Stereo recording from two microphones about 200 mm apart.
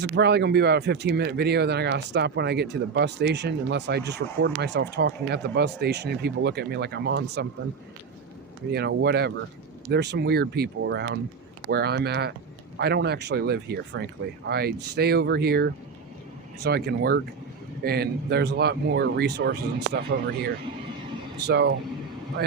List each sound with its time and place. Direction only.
0.0 s speech: 55° right (ahead or behind)
8.7 s speech: 55° right (ahead or behind)